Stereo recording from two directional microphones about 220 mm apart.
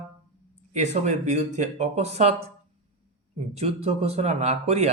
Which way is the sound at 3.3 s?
30° right (ahead or behind).